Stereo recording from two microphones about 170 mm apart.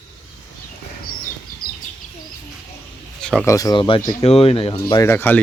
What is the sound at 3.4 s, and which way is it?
Speech, 20° left (ahead or behind).